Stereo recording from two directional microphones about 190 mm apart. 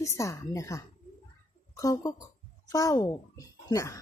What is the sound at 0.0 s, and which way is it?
A child's voice, 15° left (ahead or behind).